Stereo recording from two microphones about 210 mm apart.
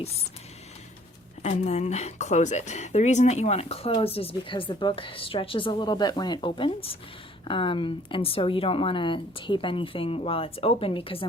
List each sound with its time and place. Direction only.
1.4 s speech: 30° left (ahead or behind)